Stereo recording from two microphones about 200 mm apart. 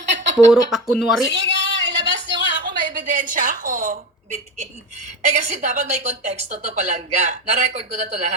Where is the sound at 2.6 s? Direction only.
40° right (ahead or behind).